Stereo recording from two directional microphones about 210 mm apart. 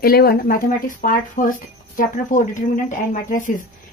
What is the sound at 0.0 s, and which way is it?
Speech, 45° left (ahead or behind).